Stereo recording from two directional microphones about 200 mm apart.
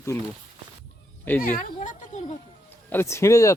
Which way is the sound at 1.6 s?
40° left (ahead or behind).